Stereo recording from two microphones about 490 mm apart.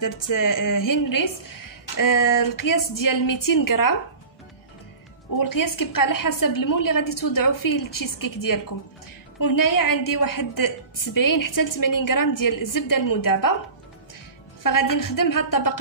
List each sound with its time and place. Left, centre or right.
0.0 s a woman's voice: left
5.3 s a woman's voice: left
14.6 s a woman's voice: left